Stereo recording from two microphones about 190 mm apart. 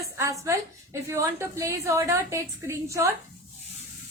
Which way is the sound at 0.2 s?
15° right (ahead or behind).